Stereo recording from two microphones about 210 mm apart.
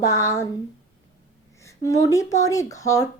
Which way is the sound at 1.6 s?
15° left (ahead or behind).